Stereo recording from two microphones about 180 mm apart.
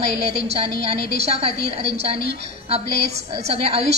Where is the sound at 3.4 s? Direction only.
35° right (ahead or behind).